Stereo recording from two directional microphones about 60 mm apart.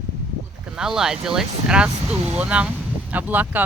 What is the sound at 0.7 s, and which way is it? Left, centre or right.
Speech, centre.